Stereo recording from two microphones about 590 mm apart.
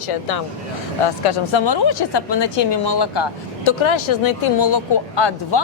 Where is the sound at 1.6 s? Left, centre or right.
Left.